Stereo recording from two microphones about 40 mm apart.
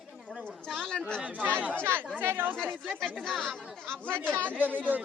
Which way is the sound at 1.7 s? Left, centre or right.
Right.